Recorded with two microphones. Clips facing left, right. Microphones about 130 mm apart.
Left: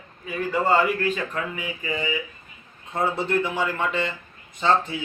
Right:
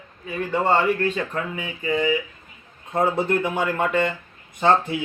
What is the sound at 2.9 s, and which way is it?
Speech, 50° right (ahead or behind).